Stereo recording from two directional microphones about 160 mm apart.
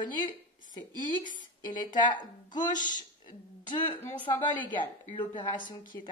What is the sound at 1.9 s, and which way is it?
Speech, 25° left (ahead or behind).